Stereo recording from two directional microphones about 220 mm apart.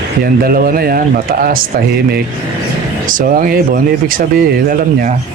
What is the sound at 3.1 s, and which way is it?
Speech, 40° right (ahead or behind).